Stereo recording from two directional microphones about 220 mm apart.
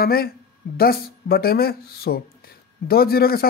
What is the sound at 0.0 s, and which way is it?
Speech, 45° left (ahead or behind).